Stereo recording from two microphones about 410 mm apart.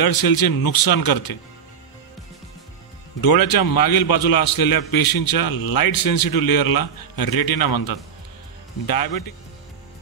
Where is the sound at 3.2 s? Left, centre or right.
Left.